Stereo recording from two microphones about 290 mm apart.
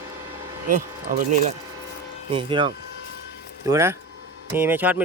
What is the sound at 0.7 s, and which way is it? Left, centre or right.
Speech, right.